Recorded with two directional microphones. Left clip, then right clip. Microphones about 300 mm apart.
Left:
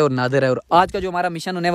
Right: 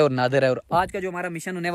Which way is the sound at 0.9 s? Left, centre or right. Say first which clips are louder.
Left 7 dB; centre.